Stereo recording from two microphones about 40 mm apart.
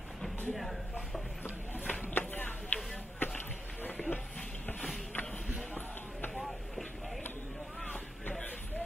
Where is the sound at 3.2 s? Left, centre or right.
Left.